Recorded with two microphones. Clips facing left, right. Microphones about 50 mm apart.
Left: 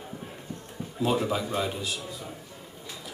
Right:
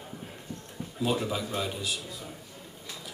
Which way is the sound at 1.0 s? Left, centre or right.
Centre.